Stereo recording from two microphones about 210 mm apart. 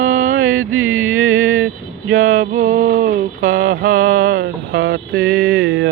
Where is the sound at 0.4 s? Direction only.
80° right.